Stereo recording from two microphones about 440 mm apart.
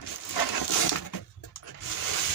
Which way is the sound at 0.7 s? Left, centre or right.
Left.